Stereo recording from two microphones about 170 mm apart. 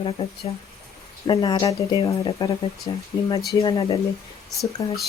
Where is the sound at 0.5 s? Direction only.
30° left (ahead or behind).